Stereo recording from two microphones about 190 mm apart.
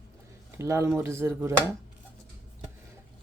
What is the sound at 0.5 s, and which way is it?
Speech, 15° right (ahead or behind).